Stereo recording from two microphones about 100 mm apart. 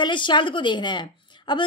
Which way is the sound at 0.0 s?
50° left (ahead or behind).